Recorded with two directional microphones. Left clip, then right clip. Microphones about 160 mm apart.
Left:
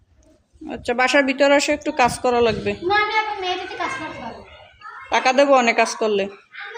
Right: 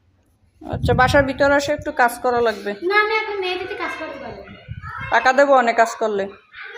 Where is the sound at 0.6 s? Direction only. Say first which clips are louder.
Right 3 dB; 5° left (ahead or behind); by 2.7 s 30° left (ahead or behind).